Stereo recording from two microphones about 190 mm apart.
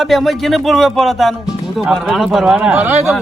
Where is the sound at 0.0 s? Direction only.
Centre (ahead or behind).